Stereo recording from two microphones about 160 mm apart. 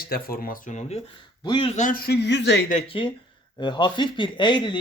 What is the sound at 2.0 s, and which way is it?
Speech, 90° left.